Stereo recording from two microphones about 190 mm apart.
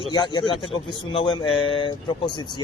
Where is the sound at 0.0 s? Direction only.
25° left (ahead or behind).